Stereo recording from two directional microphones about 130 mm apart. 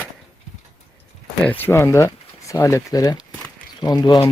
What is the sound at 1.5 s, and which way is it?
Speech, 15° left (ahead or behind).